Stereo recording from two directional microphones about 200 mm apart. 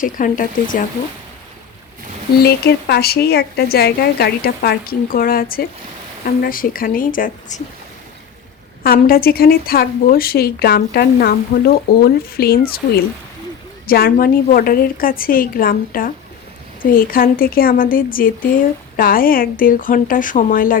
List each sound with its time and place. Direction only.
0.0 s speech: 40° left (ahead or behind)
2.4 s speech: 55° left (ahead or behind)
8.8 s speech: 50° left (ahead or behind)
13.8 s speech: 50° left (ahead or behind)